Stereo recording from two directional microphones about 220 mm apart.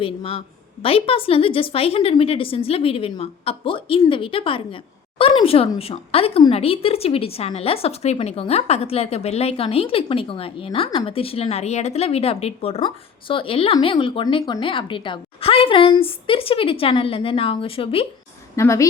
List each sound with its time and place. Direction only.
0.0 s speech: 25° left (ahead or behind)
18.5 s a woman's voice: 15° left (ahead or behind)